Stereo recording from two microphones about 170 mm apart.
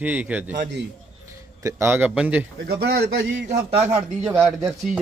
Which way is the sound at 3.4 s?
40° right (ahead or behind).